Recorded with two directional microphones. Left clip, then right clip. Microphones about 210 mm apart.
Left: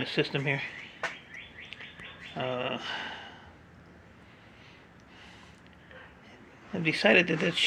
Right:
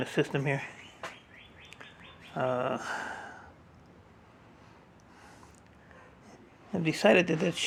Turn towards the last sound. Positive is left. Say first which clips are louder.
# left 1 dB
turn(degrees=-25)  # may be behind; listen again after turning